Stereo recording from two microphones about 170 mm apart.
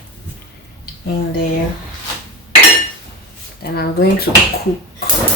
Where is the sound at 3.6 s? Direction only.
65° left (ahead or behind).